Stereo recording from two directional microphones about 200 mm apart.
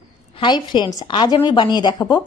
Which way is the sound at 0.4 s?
20° left (ahead or behind).